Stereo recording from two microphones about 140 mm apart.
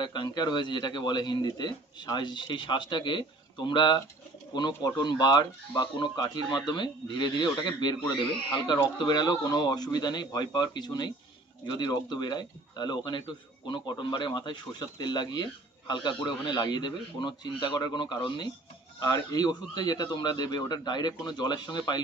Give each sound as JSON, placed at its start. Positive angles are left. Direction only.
{"t": 0.0, "sound": "a man's voice", "side_deg": 30}
{"t": 8.9, "sound": "a man's voice", "side_deg": 30}